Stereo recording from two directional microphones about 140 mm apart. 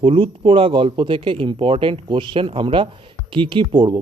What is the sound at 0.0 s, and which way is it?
Speech, 40° right (ahead or behind).